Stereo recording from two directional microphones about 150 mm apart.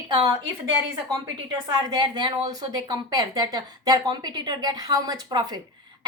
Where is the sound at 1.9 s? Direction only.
30° right (ahead or behind).